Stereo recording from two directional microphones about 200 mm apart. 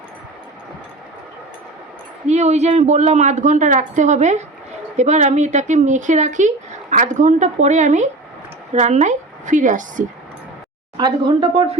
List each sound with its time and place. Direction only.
2.2 s a woman's voice: 35° right (ahead or behind)
10.9 s speech: 20° right (ahead or behind)